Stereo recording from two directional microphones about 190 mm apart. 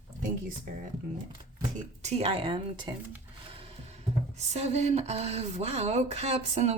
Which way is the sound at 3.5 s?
30° right (ahead or behind).